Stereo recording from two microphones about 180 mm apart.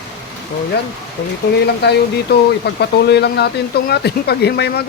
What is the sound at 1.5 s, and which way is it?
A man's voice, 65° left (ahead or behind).